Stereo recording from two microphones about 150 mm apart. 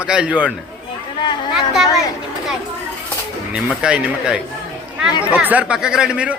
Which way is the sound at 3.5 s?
5° right (ahead or behind).